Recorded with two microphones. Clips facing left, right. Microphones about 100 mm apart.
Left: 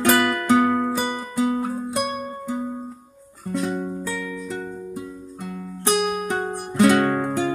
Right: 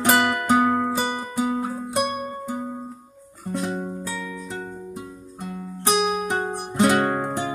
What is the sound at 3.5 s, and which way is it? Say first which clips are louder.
Music: left 2 dB; 15° right (ahead or behind).